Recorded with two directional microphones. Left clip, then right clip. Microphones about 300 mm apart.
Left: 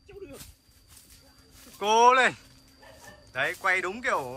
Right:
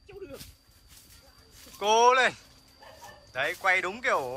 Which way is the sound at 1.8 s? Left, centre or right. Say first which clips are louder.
Left 1 dB; centre.